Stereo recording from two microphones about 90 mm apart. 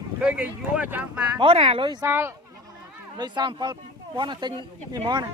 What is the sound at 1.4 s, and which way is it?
Speech, 90° right.